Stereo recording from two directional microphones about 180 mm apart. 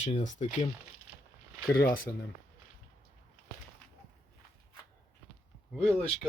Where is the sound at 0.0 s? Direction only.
40° left (ahead or behind).